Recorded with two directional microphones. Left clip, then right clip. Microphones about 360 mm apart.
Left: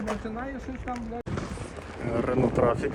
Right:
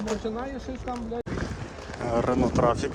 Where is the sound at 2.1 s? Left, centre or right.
Centre.